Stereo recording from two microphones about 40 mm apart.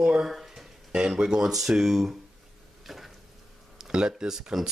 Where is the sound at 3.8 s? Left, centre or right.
Centre.